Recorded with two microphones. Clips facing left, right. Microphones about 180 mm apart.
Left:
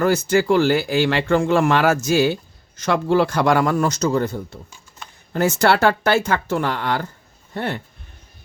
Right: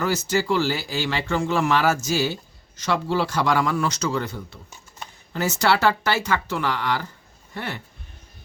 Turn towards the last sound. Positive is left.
turn(degrees=55)  # may be behind; listen again after turning